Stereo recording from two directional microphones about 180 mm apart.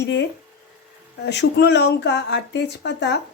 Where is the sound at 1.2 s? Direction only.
70° left (ahead or behind).